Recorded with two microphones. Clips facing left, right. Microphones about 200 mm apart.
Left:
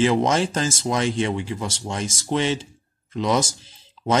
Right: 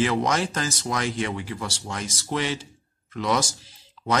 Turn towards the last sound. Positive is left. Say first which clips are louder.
# left 4 dB
turn(degrees=25)  # may be behind; listen again after turning